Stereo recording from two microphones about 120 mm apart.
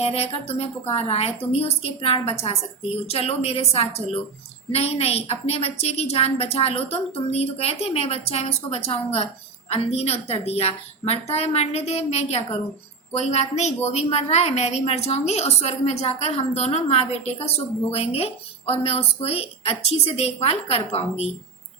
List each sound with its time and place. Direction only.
0.0 s a woman's voice: 60° left (ahead or behind)